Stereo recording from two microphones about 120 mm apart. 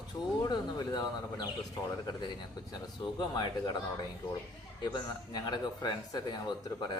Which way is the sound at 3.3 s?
35° left (ahead or behind).